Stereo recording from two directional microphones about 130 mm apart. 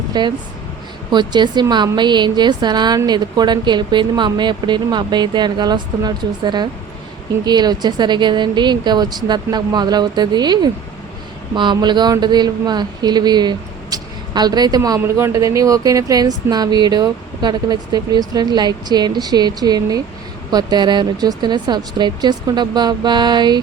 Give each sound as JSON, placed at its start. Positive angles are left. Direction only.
{"t": 0.1, "sound": "speech", "side_deg": -35}